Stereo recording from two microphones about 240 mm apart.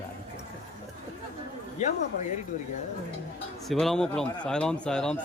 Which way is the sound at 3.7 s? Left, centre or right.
Centre.